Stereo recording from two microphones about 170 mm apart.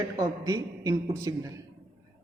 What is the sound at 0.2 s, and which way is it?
A man's voice, 20° right (ahead or behind).